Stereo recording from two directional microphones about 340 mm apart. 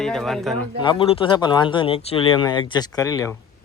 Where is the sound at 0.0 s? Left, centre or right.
Centre.